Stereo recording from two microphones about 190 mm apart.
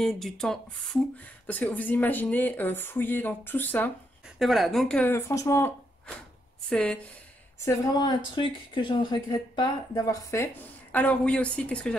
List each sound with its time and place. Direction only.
0.0 s speech: centre (ahead or behind)
4.4 s speech: centre (ahead or behind); by 5.7 s 15° left (ahead or behind)
6.7 s speech: 5° left (ahead or behind)
7.6 s speech: 20° left (ahead or behind)